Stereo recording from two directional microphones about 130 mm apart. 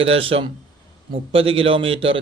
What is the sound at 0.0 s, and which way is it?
Speech, 45° right (ahead or behind).